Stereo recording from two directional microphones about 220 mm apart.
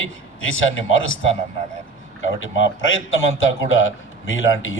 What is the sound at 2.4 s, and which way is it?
A man's voice, 60° left (ahead or behind).